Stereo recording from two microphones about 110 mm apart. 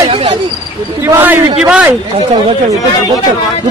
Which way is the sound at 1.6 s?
5° right (ahead or behind).